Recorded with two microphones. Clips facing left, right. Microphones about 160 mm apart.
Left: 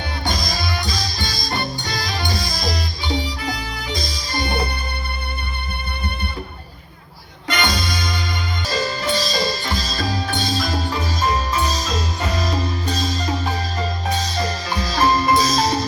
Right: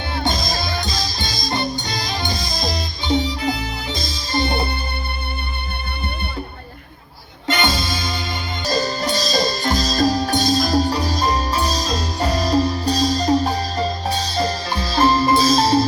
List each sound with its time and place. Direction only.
0.1 s music: 25° right (ahead or behind)
7.4 s music: 25° right (ahead or behind)
8.6 s music: 40° right (ahead or behind)